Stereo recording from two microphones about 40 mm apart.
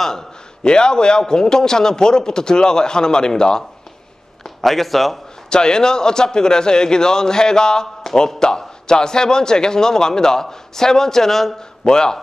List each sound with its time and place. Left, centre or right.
0.7 s a man's voice: left
4.6 s a man's voice: centre
5.5 s a man's voice: centre